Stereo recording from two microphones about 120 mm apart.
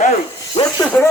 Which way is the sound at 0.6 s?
55° left (ahead or behind).